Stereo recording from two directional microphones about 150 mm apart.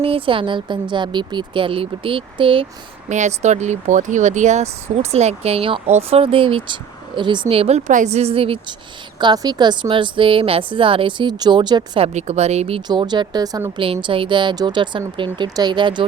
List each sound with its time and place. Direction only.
0.0 s speech: 35° right (ahead or behind)
3.1 s speech: 50° right (ahead or behind)
7.9 s speech: 55° right (ahead or behind)
9.1 s speech: 25° right (ahead or behind)
12.0 s speech: 45° right (ahead or behind)
12.9 s speech: 30° right (ahead or behind)
13.8 s speech: 35° right (ahead or behind)